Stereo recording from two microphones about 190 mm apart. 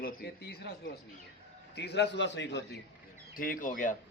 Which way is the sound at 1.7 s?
65° left (ahead or behind).